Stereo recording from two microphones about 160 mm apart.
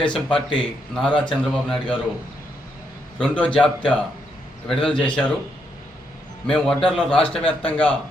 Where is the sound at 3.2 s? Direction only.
10° left (ahead or behind).